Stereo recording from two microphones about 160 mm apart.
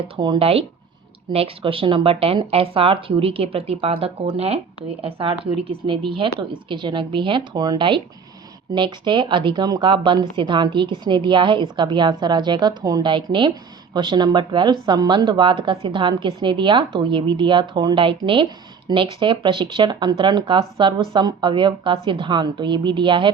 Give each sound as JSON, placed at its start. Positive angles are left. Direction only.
{"t": 0.2, "sound": "a woman's voice", "side_deg": -30}